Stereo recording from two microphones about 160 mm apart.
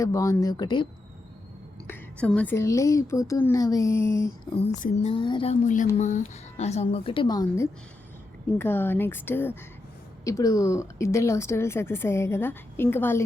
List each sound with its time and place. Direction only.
0.0 s speech: 20° left (ahead or behind)
1.9 s speech: 10° left (ahead or behind)
4.5 s speech: 40° left (ahead or behind)
5.6 s speech: 50° left (ahead or behind); by 13.2 s 15° left (ahead or behind)